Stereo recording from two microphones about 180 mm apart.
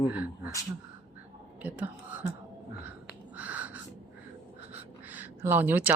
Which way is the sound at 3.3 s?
10° right (ahead or behind).